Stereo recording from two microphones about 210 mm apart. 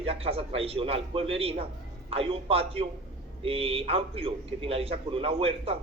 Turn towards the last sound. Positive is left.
turn(degrees=-25)  # may be behind; listen again after turning